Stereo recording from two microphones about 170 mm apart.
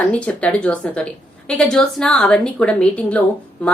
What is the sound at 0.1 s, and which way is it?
A woman's voice, 5° left (ahead or behind).